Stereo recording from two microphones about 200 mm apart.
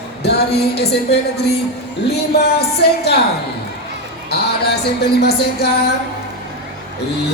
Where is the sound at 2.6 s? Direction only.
55° left (ahead or behind).